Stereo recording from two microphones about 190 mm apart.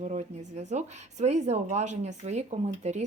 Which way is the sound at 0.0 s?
40° right (ahead or behind).